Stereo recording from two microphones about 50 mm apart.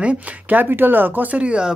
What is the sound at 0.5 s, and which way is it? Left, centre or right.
Speech, right.